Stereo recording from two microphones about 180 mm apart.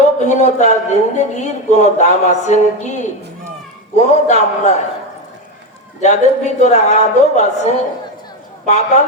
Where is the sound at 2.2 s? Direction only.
40° left (ahead or behind).